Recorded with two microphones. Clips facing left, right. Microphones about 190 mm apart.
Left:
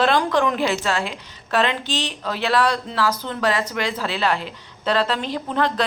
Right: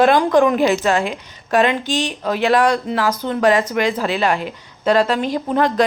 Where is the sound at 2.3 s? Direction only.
15° right (ahead or behind).